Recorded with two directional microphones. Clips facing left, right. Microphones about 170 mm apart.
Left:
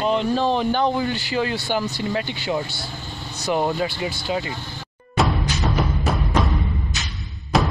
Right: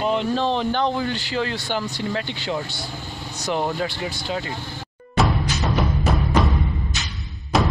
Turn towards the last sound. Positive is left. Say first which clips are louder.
# even
turn(degrees=0)  # may be behind; listen again after turning